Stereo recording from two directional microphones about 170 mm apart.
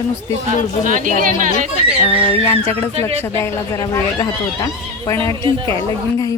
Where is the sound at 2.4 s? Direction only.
15° left (ahead or behind).